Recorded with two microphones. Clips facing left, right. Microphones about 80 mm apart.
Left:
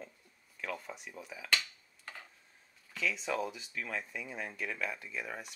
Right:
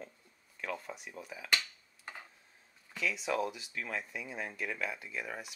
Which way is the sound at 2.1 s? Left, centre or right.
Centre.